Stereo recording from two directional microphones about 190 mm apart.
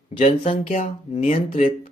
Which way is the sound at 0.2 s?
30° left (ahead or behind).